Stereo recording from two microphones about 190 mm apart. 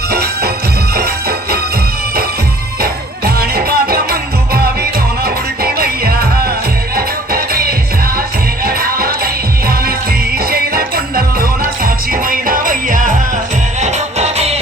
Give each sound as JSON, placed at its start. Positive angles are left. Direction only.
{"t": 0.1, "sound": "music", "side_deg": -55}
{"t": 2.8, "sound": "music", "side_deg": -55}